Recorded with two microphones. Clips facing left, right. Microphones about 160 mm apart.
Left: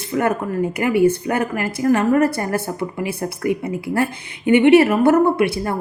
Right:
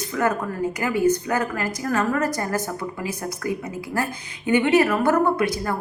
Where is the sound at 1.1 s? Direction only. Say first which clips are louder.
Left 2 dB; 25° left (ahead or behind).